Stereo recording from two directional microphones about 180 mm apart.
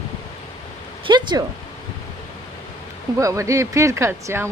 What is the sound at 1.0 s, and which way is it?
Speech, 25° right (ahead or behind).